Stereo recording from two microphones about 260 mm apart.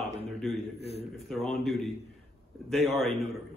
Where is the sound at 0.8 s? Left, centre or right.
Left.